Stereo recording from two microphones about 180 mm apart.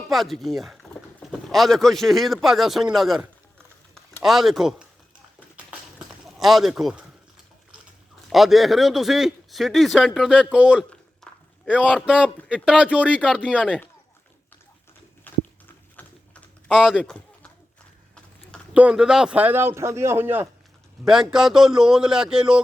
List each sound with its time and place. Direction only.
0.1 s speech: centre (ahead or behind)
6.2 s speech: centre (ahead or behind)
8.3 s a man's voice: centre (ahead or behind)
13.3 s speech: 5° left (ahead or behind)
15.3 s a sound: 10° left (ahead or behind)
18.7 s a man's voice: 5° right (ahead or behind)